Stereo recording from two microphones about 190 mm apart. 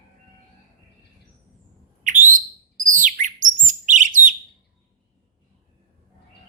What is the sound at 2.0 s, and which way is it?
Bird, 45° right (ahead or behind).